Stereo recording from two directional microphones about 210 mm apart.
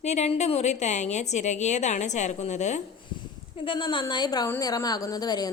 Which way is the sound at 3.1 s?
25° left (ahead or behind).